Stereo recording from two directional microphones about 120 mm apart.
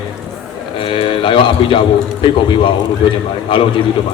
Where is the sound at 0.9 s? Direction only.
45° left (ahead or behind).